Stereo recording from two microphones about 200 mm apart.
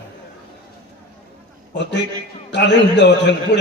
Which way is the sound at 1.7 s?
60° left (ahead or behind).